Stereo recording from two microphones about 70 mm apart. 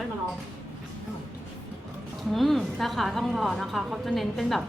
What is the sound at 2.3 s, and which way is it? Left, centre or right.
A woman's voice, centre.